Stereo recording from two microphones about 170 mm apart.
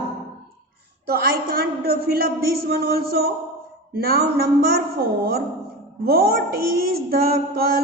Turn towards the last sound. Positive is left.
turn(degrees=-60)  # may be behind; listen again after turning